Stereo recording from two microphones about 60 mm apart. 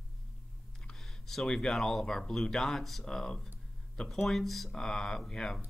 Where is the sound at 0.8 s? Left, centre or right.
Centre.